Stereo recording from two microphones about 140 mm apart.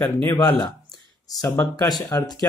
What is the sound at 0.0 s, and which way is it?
Speech, 15° left (ahead or behind).